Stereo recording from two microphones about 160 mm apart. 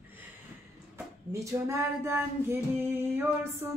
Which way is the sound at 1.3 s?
20° right (ahead or behind).